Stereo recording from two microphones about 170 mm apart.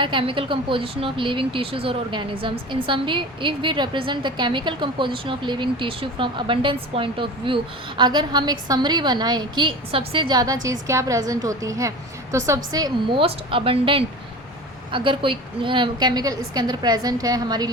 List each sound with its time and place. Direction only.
0.0 s a woman's voice: 30° right (ahead or behind)